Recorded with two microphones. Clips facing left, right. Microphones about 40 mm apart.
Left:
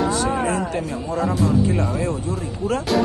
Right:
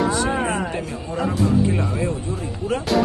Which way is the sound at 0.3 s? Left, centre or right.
Right.